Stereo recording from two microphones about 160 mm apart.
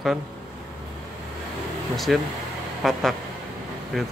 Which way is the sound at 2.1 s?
Centre (ahead or behind).